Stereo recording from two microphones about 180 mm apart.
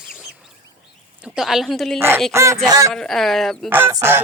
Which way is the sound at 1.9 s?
15° right (ahead or behind).